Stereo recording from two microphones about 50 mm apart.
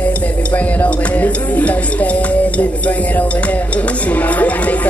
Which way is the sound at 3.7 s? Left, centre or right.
Left.